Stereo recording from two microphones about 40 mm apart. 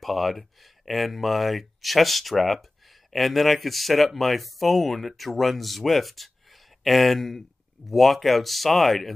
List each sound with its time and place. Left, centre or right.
0.0 s speech: centre